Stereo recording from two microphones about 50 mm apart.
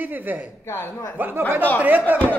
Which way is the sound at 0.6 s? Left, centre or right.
Left.